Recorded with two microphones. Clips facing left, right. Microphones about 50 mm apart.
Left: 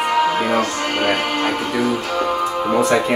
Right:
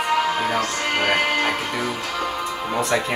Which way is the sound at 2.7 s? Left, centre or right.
Centre.